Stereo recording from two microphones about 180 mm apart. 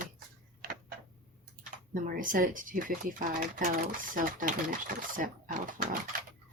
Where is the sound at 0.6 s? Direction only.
55° right (ahead or behind).